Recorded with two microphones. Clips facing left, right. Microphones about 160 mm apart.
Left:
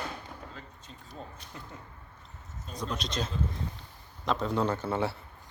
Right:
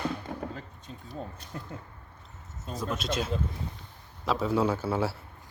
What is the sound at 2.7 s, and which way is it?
Speech, 5° right (ahead or behind).